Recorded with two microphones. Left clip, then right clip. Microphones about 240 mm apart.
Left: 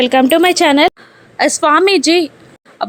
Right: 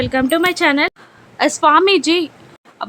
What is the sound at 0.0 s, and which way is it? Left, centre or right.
Speech, left.